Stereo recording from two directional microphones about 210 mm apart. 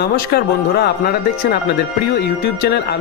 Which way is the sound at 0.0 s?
50° left (ahead or behind).